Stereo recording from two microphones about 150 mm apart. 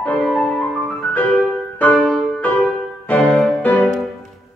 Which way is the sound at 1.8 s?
10° left (ahead or behind).